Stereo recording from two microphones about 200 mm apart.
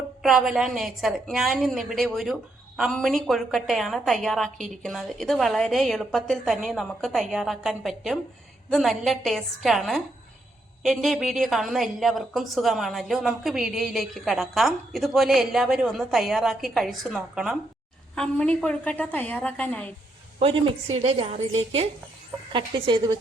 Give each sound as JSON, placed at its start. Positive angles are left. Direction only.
{"t": 0.2, "sound": "a woman's voice", "side_deg": 0}
{"t": 20.4, "sound": "a woman's voice", "side_deg": -25}